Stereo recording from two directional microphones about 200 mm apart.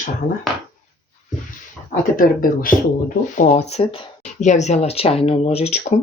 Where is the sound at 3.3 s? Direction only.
35° left (ahead or behind).